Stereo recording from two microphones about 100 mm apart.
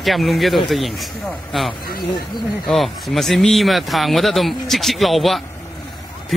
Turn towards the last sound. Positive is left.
turn(degrees=0)  # may be behind; listen again after turning